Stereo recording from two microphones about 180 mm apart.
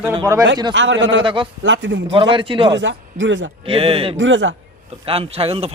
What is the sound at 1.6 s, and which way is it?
Speech, 90° right.